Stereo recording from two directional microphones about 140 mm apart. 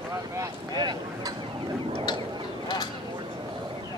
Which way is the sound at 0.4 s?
25° right (ahead or behind).